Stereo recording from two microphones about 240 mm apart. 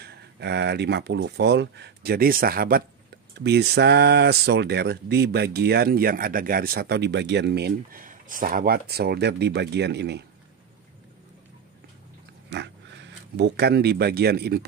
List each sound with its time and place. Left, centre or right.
0.0 s speech: right
12.4 s speech: right